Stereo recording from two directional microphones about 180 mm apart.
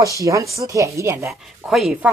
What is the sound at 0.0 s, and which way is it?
Speech, 15° right (ahead or behind).